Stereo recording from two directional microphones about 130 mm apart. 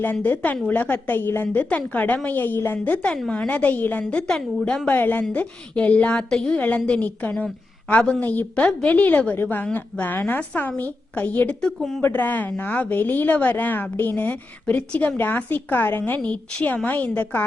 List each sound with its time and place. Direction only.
0.0 s a woman's voice: 15° left (ahead or behind)
12.0 s a woman's voice: 15° left (ahead or behind)